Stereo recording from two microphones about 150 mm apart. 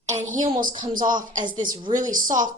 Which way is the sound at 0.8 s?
60° right (ahead or behind).